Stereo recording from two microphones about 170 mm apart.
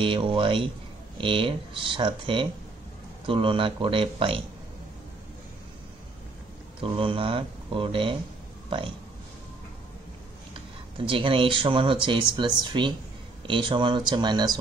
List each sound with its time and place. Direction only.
0.0 s speech: 30° right (ahead or behind)
6.8 s speech: 30° right (ahead or behind)
11.1 s speech: 30° right (ahead or behind)